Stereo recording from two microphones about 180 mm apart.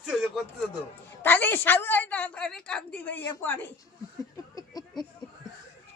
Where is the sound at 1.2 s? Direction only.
10° left (ahead or behind).